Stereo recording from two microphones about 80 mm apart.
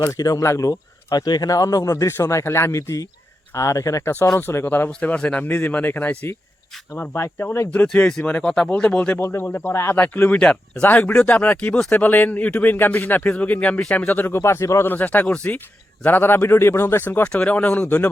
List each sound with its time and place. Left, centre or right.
0.0 s speech: left
1.2 s speech: left
4.1 s speech: left
4.9 s speech: centre
9.1 s speech: left
14.9 s speech: left
17.2 s speech: centre